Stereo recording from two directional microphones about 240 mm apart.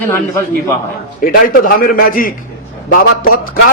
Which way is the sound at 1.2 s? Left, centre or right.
Left.